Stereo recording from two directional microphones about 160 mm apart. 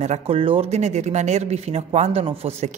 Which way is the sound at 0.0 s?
40° right (ahead or behind).